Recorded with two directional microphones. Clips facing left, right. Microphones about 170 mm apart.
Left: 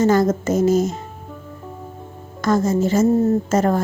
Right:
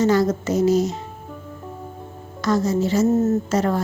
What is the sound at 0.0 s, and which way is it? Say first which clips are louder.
Speech: left 2 dB; 50° left (ahead or behind).